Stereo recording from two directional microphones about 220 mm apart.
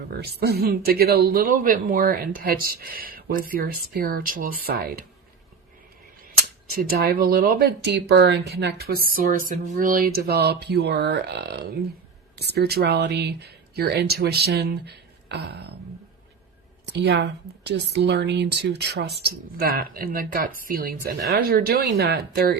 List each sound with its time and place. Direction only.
0.1 s speech: 45° right (ahead or behind)
6.9 s speech: 40° right (ahead or behind)
16.8 s speech: 50° right (ahead or behind)